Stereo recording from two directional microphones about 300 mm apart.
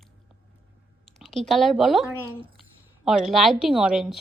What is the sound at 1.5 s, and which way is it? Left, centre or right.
A woman's voice, centre.